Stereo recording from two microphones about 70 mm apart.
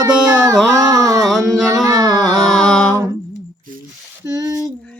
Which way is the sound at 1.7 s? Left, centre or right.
Right.